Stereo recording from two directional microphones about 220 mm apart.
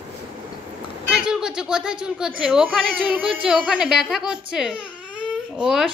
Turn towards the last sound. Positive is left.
turn(degrees=-5)  # may be behind; listen again after turning